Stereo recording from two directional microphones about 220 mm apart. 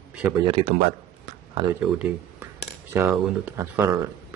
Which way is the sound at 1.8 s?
5° right (ahead or behind).